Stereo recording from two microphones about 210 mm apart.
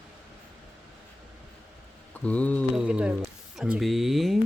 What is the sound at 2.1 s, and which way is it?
Speech, 5° left (ahead or behind).